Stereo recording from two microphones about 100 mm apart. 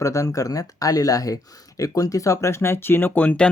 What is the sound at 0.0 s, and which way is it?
Speech, 30° left (ahead or behind).